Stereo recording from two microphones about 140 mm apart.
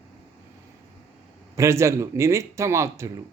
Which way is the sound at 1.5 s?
20° right (ahead or behind).